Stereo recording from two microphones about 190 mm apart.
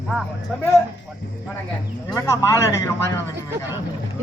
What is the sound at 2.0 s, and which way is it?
Speech, 15° left (ahead or behind).